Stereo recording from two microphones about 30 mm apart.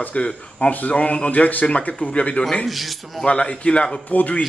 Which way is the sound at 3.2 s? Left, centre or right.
Left.